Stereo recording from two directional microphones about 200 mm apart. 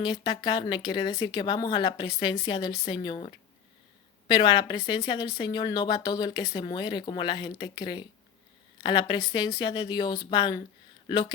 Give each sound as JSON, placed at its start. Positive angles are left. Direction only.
{"t": 0.0, "sound": "speech", "side_deg": 20}